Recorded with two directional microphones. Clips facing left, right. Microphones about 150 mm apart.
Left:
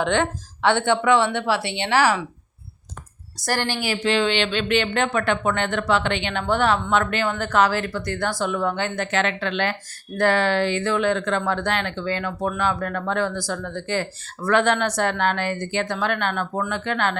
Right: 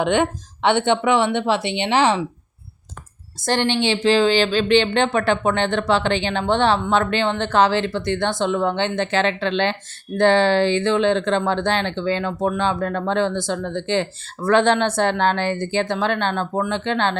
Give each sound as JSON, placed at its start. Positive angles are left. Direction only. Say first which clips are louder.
{"t": 0.0, "sound": "speech", "louder": "right 3 dB", "side_deg": -15}
{"t": 3.4, "sound": "speech", "louder": "right 5 dB", "side_deg": -20}